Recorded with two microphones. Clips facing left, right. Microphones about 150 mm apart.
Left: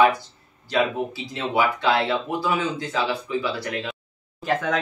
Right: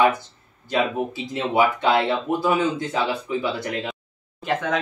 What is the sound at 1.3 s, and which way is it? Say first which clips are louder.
Speech: right 3 dB; 20° right (ahead or behind).